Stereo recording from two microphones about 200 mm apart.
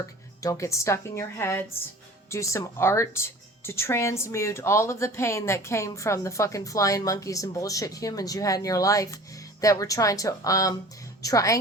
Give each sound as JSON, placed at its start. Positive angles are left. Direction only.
{"t": 0.0, "sound": "speech", "side_deg": 15}